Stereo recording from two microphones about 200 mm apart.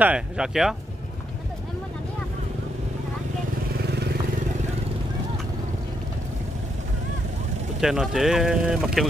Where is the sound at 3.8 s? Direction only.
55° right (ahead or behind).